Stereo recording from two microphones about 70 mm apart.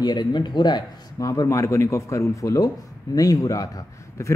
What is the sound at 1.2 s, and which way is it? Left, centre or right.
A man's voice, left.